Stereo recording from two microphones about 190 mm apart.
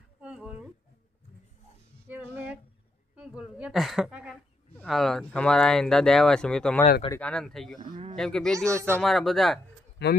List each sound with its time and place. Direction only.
0.2 s speech: 5° right (ahead or behind)
2.0 s music: 10° right (ahead or behind)
3.2 s speech: 5° right (ahead or behind)
10.0 s speech: 60° left (ahead or behind)